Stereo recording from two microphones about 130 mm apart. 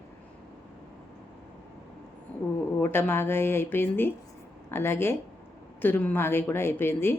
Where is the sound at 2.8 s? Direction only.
15° left (ahead or behind).